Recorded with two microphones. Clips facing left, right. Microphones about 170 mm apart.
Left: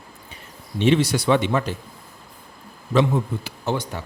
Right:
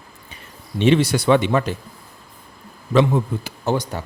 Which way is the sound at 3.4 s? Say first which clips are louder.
Right 3 dB; 40° right (ahead or behind).